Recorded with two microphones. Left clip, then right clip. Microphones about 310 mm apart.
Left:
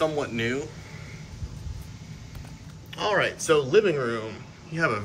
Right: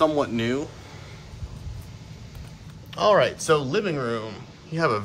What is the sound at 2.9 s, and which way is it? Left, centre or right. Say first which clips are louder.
A man's voice: right 6 dB; centre.